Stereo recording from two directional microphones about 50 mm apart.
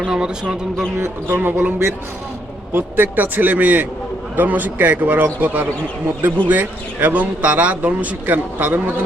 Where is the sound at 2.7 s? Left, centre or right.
Right.